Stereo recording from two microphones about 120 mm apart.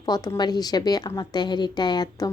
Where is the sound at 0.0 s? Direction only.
35° left (ahead or behind).